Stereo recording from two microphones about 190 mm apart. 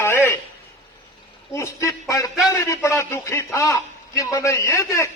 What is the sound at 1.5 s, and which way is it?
A man's voice, 15° left (ahead or behind).